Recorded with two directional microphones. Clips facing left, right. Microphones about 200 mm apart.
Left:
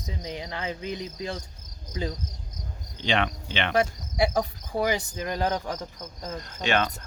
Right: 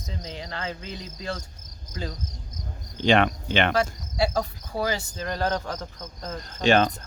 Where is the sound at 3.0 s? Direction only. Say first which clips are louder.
Right 6 dB; 45° right (ahead or behind).